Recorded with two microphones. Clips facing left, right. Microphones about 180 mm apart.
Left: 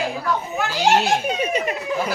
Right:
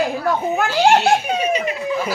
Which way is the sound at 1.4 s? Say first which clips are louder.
Right 2 dB; 50° left (ahead or behind).